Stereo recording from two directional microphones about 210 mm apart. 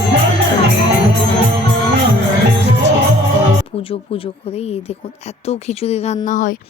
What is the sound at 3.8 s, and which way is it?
Speech, 25° left (ahead or behind).